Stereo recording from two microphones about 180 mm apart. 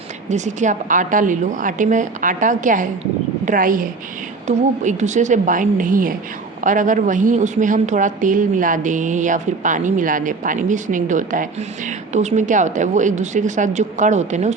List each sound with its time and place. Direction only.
0.3 s a woman's voice: 40° right (ahead or behind)